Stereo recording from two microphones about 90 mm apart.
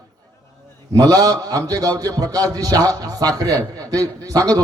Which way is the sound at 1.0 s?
45° right (ahead or behind).